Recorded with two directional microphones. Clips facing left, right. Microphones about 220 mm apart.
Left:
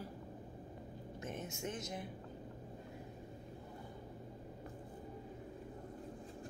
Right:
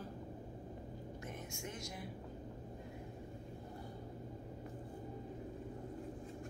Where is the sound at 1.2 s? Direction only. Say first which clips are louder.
Left 6 dB; 20° left (ahead or behind).